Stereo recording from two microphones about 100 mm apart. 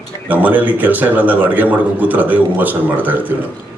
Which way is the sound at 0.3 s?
15° right (ahead or behind).